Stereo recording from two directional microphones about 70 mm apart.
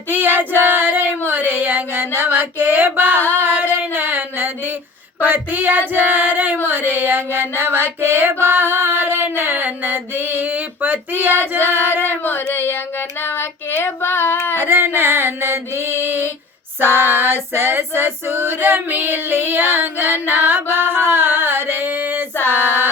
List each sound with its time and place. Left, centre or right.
0.1 s female singing: right
1.3 s a sound: right
3.3 s female singing: right
5.2 s a sound: right
5.9 s music: right
12.2 s child singing: left
14.6 s music: right
20.2 s a sound: right
22.4 s music: right